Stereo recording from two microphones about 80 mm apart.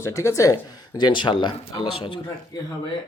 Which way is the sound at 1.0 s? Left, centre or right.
Left.